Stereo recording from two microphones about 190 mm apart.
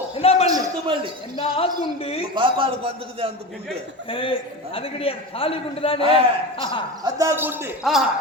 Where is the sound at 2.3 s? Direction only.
25° right (ahead or behind).